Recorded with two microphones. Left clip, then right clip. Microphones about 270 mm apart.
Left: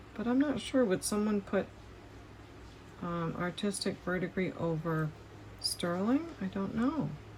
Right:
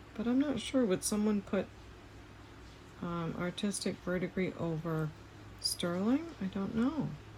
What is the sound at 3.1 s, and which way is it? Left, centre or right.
Speech, centre.